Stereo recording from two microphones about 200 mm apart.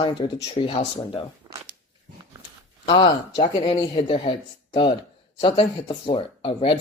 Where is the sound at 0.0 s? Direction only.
25° left (ahead or behind).